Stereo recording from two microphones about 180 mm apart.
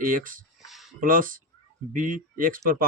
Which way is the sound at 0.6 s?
Centre (ahead or behind).